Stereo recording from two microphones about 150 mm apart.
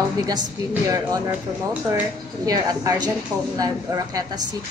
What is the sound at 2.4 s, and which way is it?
A woman's voice, 25° right (ahead or behind).